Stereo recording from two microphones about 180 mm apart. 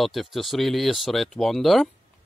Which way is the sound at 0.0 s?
Centre (ahead or behind).